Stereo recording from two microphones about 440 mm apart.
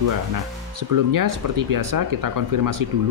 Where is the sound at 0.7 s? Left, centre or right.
Right.